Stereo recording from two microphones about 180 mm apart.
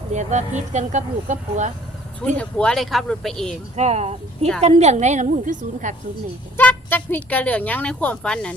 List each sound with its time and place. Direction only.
0.1 s speech: 40° right (ahead or behind)
2.2 s speech: 5° left (ahead or behind)
3.8 s speech: 35° right (ahead or behind)
6.6 s speech: 10° left (ahead or behind)